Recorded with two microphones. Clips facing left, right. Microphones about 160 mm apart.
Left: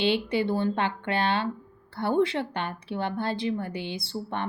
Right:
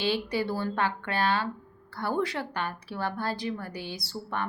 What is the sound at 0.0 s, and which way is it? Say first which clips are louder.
A woman's voice: left 3 dB; 25° left (ahead or behind).